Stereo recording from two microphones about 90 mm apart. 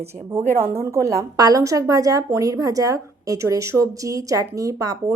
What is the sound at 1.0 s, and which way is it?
A woman's voice, 40° right (ahead or behind).